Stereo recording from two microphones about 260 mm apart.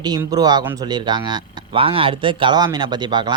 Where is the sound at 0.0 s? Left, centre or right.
Centre.